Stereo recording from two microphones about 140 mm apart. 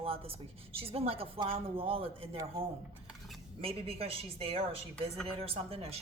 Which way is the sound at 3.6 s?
45° right (ahead or behind).